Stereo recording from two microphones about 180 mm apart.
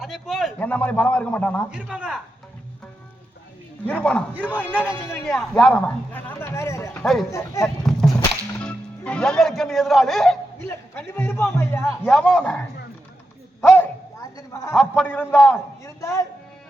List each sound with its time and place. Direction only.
0.0 s a man's voice: centre (ahead or behind)
1.7 s a man's voice: 5° right (ahead or behind)
3.8 s a man's voice: 5° left (ahead or behind)
4.4 s a man's voice: 10° right (ahead or behind)
5.1 s a man's voice: 5° left (ahead or behind)
7.0 s speech: centre (ahead or behind)
7.3 s a man's voice: 15° left (ahead or behind)
8.6 s speech: 5° left (ahead or behind)
10.7 s a man's voice: 10° left (ahead or behind)
13.7 s a sound: 20° left (ahead or behind)
14.7 s a man's voice: centre (ahead or behind)
15.5 s a man's voice: 15° left (ahead or behind)